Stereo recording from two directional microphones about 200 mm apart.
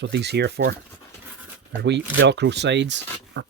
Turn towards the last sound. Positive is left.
turn(degrees=-60)  # may be behind; listen again after turning